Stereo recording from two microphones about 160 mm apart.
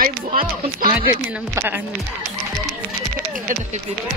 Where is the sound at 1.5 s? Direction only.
15° right (ahead or behind).